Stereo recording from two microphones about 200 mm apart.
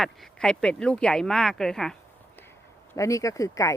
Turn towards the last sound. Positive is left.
turn(degrees=15)  # may be behind; listen again after turning